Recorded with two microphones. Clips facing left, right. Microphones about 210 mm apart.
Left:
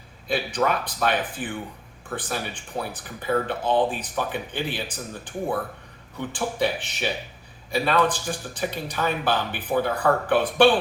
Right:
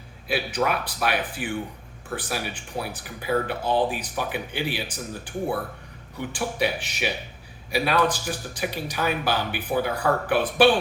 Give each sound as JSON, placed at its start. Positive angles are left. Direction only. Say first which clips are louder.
{"t": 0.3, "sound": "speech", "louder": "left 1 dB", "side_deg": -10}
{"t": 6.1, "sound": "speech", "louder": "left 1 dB", "side_deg": -10}